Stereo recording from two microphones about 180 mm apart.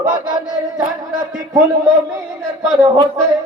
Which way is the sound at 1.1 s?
20° right (ahead or behind).